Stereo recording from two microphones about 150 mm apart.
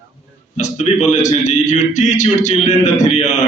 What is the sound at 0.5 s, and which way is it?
A man's voice, 50° left (ahead or behind).